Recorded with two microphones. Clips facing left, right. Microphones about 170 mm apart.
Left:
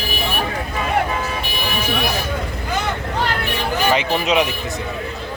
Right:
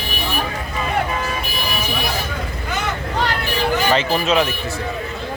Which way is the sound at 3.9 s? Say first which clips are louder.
Left 2 dB; 15° left (ahead or behind).